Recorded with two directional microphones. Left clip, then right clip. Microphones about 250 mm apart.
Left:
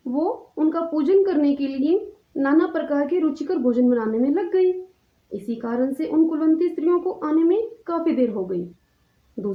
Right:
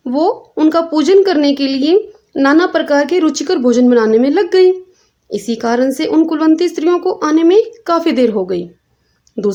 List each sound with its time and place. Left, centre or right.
0.0 s a woman's voice: right